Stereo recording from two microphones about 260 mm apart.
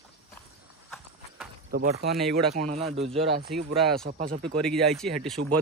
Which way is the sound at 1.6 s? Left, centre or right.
Right.